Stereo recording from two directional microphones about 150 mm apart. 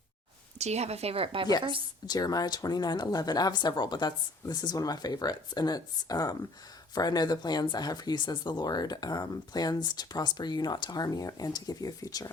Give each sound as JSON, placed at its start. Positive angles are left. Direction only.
{"t": 0.6, "sound": "speech", "side_deg": -45}
{"t": 2.0, "sound": "speech", "side_deg": 25}